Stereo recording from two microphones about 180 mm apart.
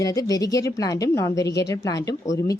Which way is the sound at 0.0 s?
20° left (ahead or behind).